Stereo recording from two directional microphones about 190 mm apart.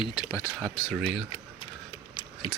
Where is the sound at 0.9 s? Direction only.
Centre (ahead or behind).